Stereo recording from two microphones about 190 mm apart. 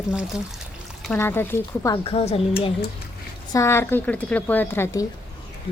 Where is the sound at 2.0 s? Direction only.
30° left (ahead or behind).